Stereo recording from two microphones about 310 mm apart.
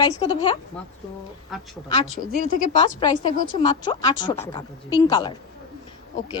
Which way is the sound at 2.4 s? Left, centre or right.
Left.